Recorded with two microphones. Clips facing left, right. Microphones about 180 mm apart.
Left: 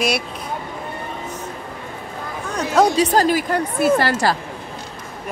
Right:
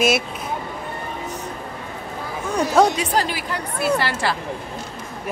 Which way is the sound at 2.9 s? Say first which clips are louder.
Left 6 dB; 40° left (ahead or behind).